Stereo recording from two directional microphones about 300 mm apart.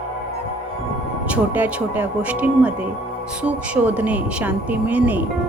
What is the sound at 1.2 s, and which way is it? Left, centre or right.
A woman's voice, centre.